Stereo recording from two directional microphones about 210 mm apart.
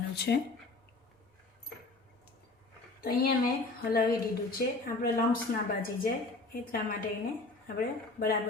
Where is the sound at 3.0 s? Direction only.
45° left (ahead or behind).